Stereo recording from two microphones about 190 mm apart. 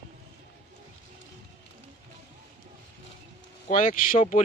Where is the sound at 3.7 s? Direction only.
45° left (ahead or behind).